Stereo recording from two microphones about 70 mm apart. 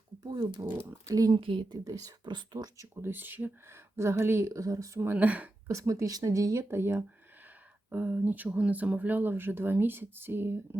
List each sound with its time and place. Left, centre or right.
0.2 s speech: right
1.9 s speech: right
3.0 s speech: right
3.9 s speech: right
5.1 s speech: right
5.6 s speech: right
7.9 s speech: right